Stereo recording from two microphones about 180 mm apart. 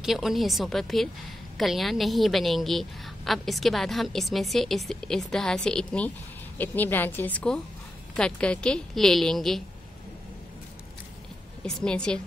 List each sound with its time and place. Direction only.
0.0 s a woman's voice: centre (ahead or behind)
11.6 s a woman's voice: 5° left (ahead or behind)